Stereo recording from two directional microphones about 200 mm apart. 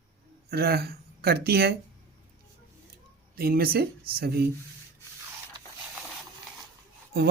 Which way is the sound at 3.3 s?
50° right (ahead or behind).